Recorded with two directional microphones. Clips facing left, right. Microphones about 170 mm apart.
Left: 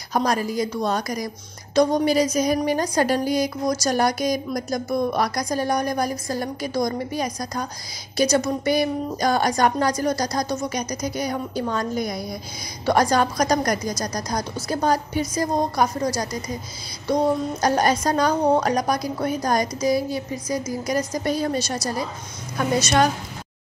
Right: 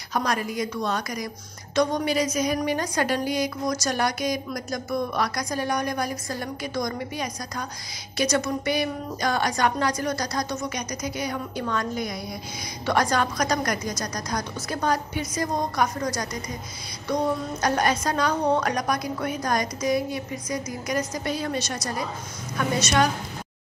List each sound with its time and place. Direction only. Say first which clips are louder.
0.1 s a woman's voice: left 4 dB; 35° left (ahead or behind)